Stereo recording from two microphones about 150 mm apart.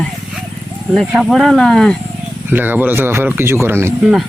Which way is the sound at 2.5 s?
15° right (ahead or behind).